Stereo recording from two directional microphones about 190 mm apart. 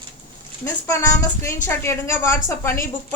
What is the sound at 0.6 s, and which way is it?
A woman's voice, 15° left (ahead or behind).